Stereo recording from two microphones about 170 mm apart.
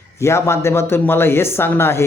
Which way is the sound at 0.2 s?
15° left (ahead or behind).